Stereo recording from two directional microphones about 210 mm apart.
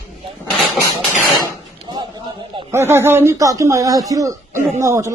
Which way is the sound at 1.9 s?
20° right (ahead or behind).